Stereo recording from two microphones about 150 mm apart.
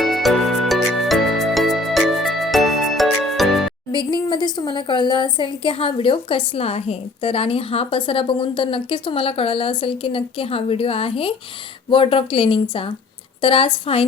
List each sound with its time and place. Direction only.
0.0 s music: centre (ahead or behind)
3.9 s a woman's voice: 30° left (ahead or behind)